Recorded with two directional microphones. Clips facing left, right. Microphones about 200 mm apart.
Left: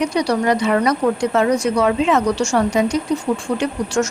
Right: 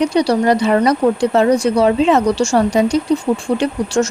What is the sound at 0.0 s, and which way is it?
Speech, 30° right (ahead or behind).